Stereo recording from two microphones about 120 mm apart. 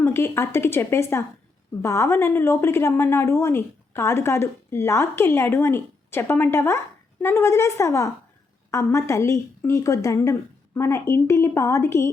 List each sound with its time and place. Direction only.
0.0 s a woman's voice: 20° left (ahead or behind)